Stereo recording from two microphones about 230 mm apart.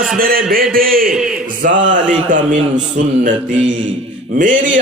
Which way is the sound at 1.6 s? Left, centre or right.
Right.